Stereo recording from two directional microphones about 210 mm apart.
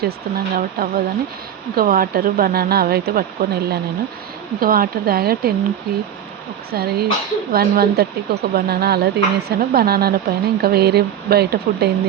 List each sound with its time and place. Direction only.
0.0 s speech: 45° right (ahead or behind)
6.7 s speech: 50° right (ahead or behind)